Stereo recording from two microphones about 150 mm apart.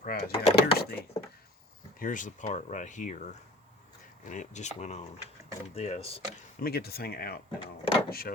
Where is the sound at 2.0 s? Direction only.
60° left (ahead or behind); by 6.2 s 40° left (ahead or behind).